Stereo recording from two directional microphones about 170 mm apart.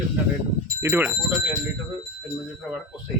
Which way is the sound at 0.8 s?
10° right (ahead or behind).